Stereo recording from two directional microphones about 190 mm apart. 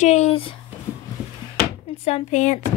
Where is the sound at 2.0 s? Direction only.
40° left (ahead or behind).